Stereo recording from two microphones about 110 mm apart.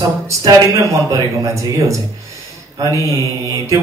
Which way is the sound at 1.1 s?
30° right (ahead or behind).